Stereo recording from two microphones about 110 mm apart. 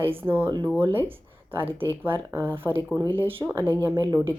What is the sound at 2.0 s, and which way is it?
A woman's voice, 20° right (ahead or behind).